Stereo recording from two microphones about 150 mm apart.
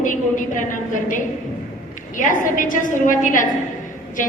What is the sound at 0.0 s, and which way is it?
Speech, 60° left (ahead or behind).